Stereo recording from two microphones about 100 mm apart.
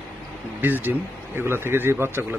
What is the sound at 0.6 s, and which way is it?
Speech, 20° right (ahead or behind).